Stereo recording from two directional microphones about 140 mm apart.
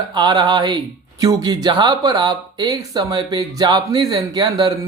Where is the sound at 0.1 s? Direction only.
30° right (ahead or behind).